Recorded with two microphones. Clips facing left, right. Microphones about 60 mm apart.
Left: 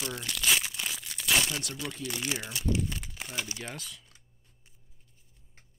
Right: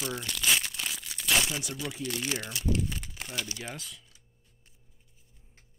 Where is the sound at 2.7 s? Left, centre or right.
Centre.